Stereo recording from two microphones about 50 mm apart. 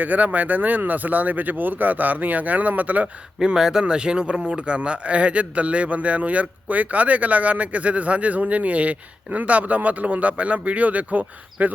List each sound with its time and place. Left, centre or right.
0.0 s speech: right
3.3 s speech: centre; by 11.7 s right